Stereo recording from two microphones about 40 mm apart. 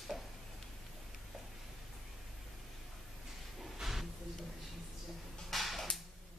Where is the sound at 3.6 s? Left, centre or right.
Centre.